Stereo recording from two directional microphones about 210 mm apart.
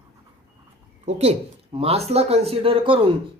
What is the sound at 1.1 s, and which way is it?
Speech, 30° right (ahead or behind).